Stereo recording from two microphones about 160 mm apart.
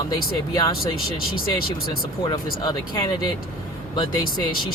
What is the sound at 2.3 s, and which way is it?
Speech, 25° left (ahead or behind).